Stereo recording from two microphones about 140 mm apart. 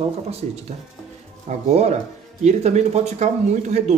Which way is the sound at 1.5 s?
55° right (ahead or behind).